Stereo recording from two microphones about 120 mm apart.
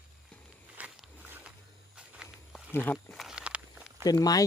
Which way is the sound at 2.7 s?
15° left (ahead or behind).